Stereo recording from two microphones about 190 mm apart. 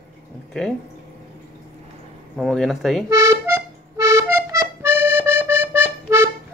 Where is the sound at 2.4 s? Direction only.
Centre (ahead or behind).